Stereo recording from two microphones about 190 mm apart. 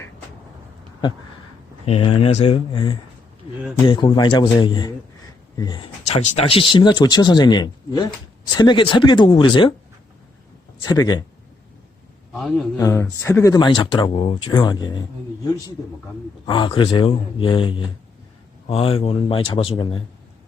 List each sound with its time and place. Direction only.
1.9 s speech: 30° left (ahead or behind)
6.1 s speech: 35° left (ahead or behind)
10.8 s speech: 20° left (ahead or behind)
12.3 s a man's voice: centre (ahead or behind)
12.7 s speech: 15° left (ahead or behind)
16.5 s speech: 25° left (ahead or behind)